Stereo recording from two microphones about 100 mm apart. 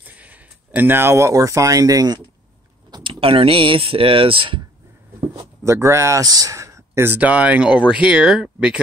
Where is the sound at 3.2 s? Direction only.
70° right (ahead or behind).